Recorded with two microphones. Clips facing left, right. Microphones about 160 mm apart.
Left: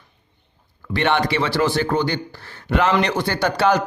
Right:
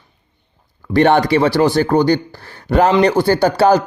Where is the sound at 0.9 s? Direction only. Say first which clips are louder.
Right 8 dB; 40° right (ahead or behind).